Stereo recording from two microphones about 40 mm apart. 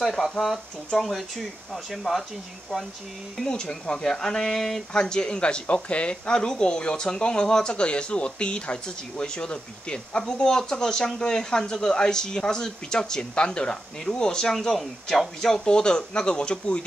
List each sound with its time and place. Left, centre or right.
0.0 s speech: centre
3.4 s speech: centre
4.9 s speech: centre
14.5 s speech: centre
15.4 s speech: centre